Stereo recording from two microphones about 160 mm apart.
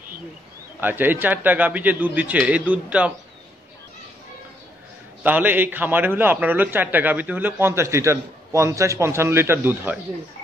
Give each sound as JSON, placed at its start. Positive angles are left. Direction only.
{"t": 0.7, "sound": "a man's voice", "side_deg": -10}
{"t": 5.2, "sound": "a man's voice", "side_deg": -10}